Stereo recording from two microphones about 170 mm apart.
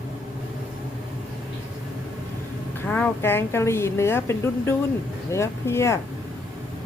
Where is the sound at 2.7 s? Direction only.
10° left (ahead or behind).